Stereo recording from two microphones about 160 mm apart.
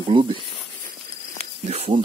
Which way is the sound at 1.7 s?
40° right (ahead or behind).